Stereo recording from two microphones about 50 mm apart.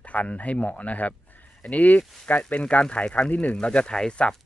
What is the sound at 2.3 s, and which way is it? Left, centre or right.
Speech, left.